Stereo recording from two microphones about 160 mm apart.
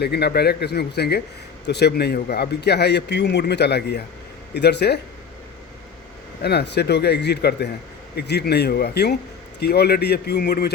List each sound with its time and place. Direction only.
0.0 s a man's voice: 90° left
6.4 s a man's voice: 90° left